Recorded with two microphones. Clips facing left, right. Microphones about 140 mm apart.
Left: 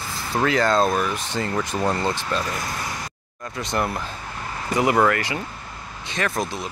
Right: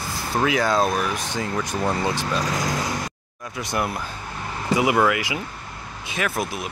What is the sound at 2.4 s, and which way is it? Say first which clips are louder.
Speech: right 4 dB; 90° right.